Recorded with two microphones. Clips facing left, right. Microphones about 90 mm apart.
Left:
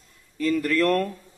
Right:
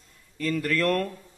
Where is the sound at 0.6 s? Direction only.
35° left (ahead or behind).